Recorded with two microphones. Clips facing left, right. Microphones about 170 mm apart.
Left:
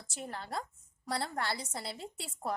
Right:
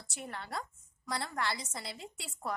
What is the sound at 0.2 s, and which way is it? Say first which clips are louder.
A woman's voice: left 2 dB; 30° left (ahead or behind).